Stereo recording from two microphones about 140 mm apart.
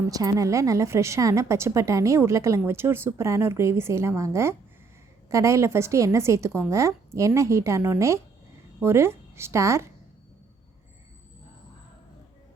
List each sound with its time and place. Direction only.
0.1 s a woman's voice: 25° right (ahead or behind)